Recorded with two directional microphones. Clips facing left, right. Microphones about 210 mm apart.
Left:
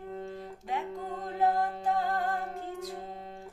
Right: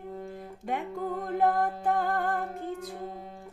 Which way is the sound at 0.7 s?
55° right (ahead or behind).